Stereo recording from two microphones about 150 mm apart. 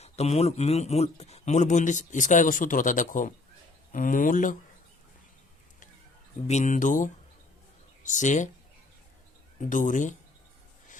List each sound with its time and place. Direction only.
0.0 s a man's voice: 45° left (ahead or behind); by 4.5 s 60° left (ahead or behind)
6.5 s a man's voice: 55° left (ahead or behind)
9.6 s a man's voice: 60° left (ahead or behind)